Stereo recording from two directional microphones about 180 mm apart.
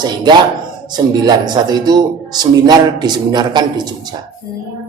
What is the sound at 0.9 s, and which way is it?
Speech, 25° right (ahead or behind).